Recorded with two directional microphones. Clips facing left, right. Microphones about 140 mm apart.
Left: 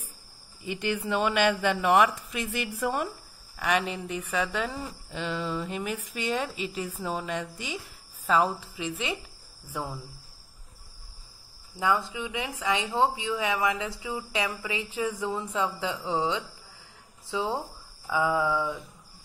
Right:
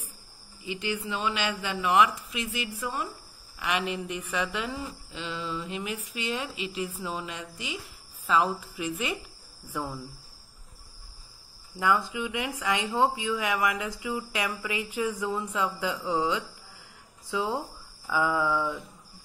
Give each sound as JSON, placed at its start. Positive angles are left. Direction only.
{"t": 0.7, "sound": "speech", "side_deg": 50}
{"t": 3.5, "sound": "speech", "side_deg": 40}
{"t": 5.1, "sound": "speech", "side_deg": 50}
{"t": 8.3, "sound": "speech", "side_deg": 35}
{"t": 11.8, "sound": "speech", "side_deg": 20}